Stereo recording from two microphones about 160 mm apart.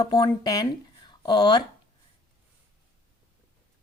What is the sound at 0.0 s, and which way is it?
Speech, 25° left (ahead or behind).